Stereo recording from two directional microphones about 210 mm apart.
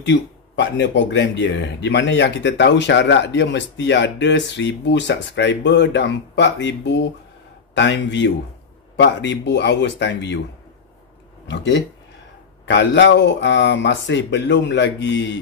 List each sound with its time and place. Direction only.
0.0 s speech: 55° left (ahead or behind)
11.4 s speech: 55° left (ahead or behind)